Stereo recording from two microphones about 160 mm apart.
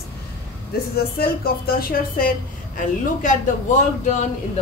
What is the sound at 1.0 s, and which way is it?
Music, 70° left (ahead or behind).